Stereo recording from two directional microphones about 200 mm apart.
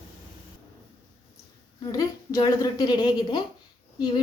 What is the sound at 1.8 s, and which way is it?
A woman's voice, 20° left (ahead or behind).